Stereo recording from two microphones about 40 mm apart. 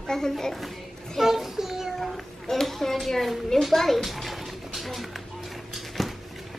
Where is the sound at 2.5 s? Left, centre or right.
Centre.